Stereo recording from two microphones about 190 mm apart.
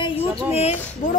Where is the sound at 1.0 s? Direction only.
40° left (ahead or behind).